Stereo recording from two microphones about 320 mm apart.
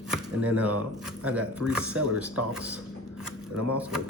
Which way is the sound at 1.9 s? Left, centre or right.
Right.